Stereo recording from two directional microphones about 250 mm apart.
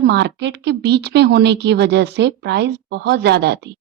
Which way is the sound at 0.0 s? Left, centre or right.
Right.